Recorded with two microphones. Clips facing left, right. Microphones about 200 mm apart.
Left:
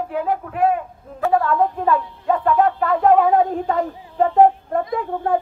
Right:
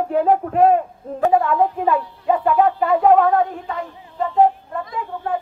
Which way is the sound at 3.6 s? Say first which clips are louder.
Left 7 dB; 45° left (ahead or behind).